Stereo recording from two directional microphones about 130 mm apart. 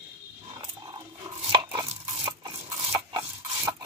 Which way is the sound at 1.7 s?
45° right (ahead or behind).